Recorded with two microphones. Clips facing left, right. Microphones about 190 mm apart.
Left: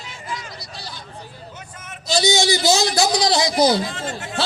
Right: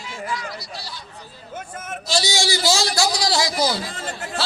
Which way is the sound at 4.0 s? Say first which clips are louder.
Left 3 dB; 40° left (ahead or behind).